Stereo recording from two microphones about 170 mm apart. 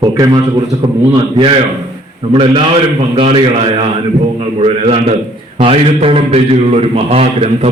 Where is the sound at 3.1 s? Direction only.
35° right (ahead or behind).